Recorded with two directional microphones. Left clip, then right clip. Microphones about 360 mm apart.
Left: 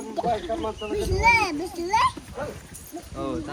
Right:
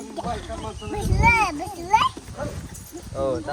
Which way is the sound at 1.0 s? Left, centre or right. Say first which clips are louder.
Right 1 dB; centre.